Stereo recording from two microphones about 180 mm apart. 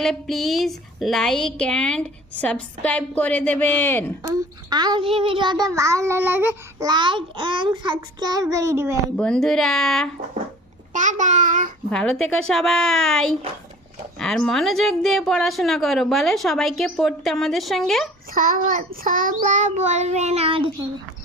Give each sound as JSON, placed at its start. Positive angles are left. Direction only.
{"t": 0.0, "sound": "speech", "side_deg": 0}
{"t": 4.2, "sound": "a child's voice", "side_deg": -20}
{"t": 6.8, "sound": "a child's voice", "side_deg": -25}
{"t": 9.1, "sound": "speech", "side_deg": 5}
{"t": 10.9, "sound": "a child's voice", "side_deg": -45}
{"t": 11.9, "sound": "speech", "side_deg": 5}
{"t": 18.3, "sound": "child singing", "side_deg": -50}